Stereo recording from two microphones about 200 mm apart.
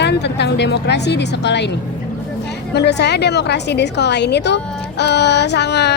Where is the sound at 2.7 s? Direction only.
55° left (ahead or behind).